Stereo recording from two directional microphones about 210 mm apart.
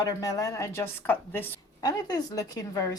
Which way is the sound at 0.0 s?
15° left (ahead or behind).